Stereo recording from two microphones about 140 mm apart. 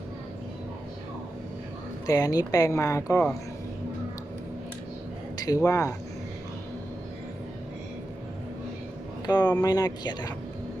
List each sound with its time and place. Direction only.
2.0 s speech: 25° left (ahead or behind)
5.4 s speech: 25° left (ahead or behind)
9.2 s speech: 30° left (ahead or behind)